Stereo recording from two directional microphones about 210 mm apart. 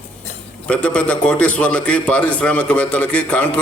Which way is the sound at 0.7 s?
5° left (ahead or behind).